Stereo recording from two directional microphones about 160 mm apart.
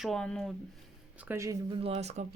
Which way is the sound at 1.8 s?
45° right (ahead or behind).